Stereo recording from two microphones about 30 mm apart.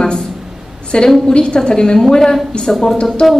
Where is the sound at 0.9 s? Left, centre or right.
Left; by 2.9 s centre.